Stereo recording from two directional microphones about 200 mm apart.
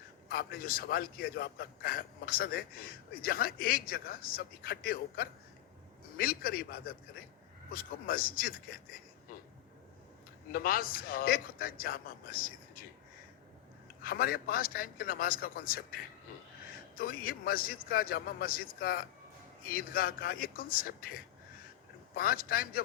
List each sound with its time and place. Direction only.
0.3 s a man's voice: 45° left (ahead or behind)
10.5 s a man's voice: 45° left (ahead or behind)
14.0 s a man's voice: 45° left (ahead or behind)
17.0 s a man's voice: 45° left (ahead or behind)
22.1 s a man's voice: 45° left (ahead or behind)